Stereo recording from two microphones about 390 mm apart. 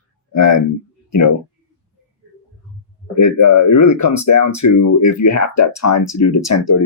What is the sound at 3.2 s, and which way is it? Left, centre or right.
Speech, left.